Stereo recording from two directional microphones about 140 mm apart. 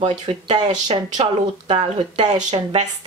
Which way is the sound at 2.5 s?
50° right (ahead or behind).